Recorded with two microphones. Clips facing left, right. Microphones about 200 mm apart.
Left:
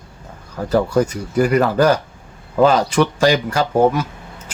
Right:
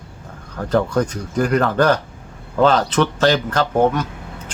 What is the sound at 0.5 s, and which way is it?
Speech, 10° left (ahead or behind).